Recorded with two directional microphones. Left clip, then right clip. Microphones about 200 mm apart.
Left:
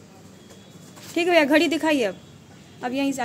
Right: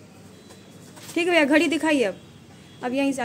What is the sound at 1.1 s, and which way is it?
A woman's voice, centre (ahead or behind).